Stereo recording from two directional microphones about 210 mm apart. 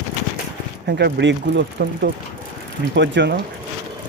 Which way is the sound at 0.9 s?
50° right (ahead or behind).